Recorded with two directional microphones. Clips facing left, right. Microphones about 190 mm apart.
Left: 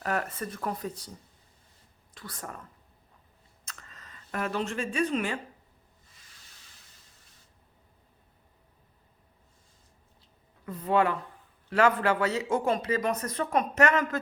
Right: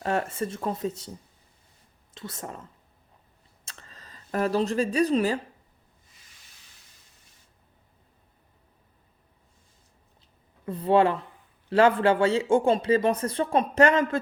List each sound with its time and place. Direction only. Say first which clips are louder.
0.0 s speech: right 4 dB; 25° right (ahead or behind)
2.1 s speech: right 4 dB; 25° right (ahead or behind)
3.7 s speech: right 1 dB; 30° right (ahead or behind)
10.7 s speech: right 5 dB; 30° right (ahead or behind)